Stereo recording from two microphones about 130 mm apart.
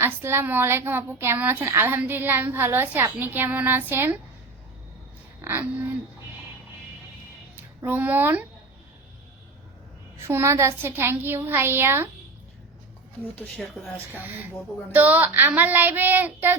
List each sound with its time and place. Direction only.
0.0 s a woman's voice: 20° right (ahead or behind)
5.4 s speech: 15° right (ahead or behind)
7.9 s a woman's voice: 15° right (ahead or behind)
10.2 s a woman's voice: 20° right (ahead or behind)
13.6 s speech: centre (ahead or behind)
14.1 s a woman's voice: 15° right (ahead or behind)